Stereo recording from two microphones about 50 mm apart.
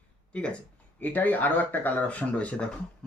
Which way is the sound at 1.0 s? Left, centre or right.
Left.